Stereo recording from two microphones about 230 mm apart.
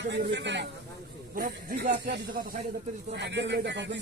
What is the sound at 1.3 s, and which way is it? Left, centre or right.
Speech, right.